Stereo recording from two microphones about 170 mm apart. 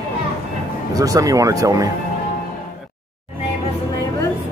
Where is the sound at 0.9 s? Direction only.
20° right (ahead or behind).